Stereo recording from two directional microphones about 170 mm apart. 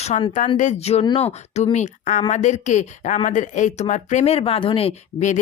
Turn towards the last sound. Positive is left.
turn(degrees=40)  # may be behind; listen again after turning